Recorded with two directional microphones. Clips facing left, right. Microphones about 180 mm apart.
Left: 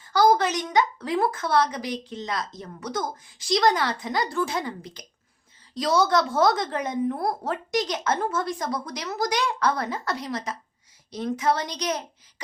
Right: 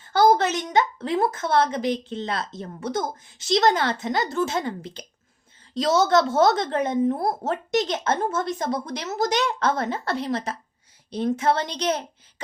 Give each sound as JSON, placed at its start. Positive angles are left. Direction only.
{"t": 0.0, "sound": "a woman's voice", "side_deg": -25}